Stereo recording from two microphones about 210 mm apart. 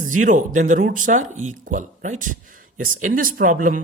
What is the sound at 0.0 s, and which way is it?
Speech, 40° right (ahead or behind).